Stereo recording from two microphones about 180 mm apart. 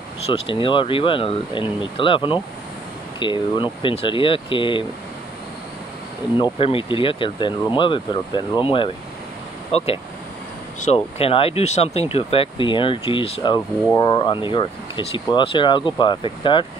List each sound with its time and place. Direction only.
0.3 s speech: 30° left (ahead or behind)
6.3 s speech: 30° left (ahead or behind)